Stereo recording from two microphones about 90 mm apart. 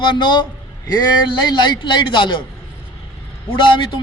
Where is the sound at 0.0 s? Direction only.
60° left (ahead or behind).